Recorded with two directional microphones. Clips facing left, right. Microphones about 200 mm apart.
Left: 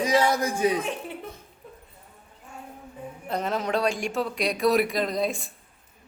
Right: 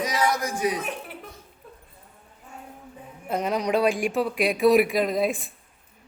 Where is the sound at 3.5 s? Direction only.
Centre (ahead or behind).